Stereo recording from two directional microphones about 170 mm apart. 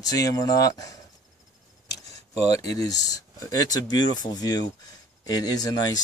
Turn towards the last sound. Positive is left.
turn(degrees=20)  # may be behind; listen again after turning